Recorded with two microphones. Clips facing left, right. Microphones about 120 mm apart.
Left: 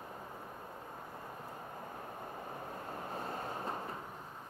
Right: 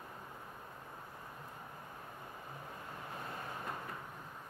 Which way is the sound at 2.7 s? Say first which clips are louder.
Left 5 dB; 40° left (ahead or behind).